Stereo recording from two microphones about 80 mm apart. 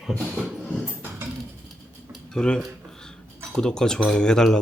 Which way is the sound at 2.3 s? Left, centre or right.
Centre.